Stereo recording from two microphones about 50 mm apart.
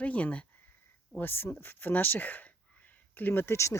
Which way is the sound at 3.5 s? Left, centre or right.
Left.